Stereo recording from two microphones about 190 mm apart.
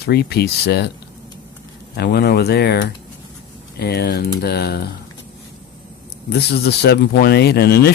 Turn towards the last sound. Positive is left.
turn(degrees=60)  # may be behind; listen again after turning